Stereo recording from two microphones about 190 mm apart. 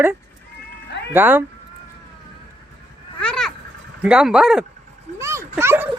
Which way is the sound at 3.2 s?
5° left (ahead or behind).